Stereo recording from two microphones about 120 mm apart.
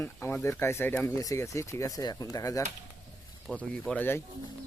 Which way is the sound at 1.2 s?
25° left (ahead or behind).